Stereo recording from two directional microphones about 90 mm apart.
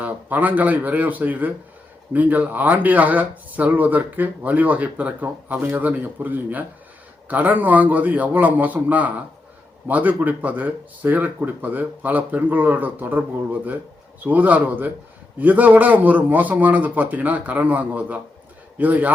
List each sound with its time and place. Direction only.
0.0 s speech: 20° right (ahead or behind)